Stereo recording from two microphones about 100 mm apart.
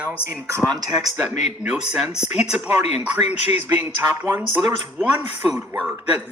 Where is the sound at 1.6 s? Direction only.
10° right (ahead or behind).